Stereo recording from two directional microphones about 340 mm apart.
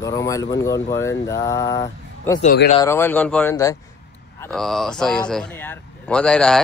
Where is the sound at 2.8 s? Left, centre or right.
Centre.